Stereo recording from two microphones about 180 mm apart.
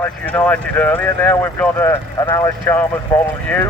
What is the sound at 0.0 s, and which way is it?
Speech, 10° left (ahead or behind).